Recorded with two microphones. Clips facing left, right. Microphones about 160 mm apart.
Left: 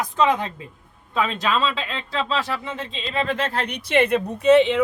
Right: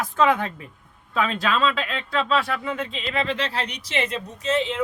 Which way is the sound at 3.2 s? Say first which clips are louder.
Left 3 dB; 50° left (ahead or behind).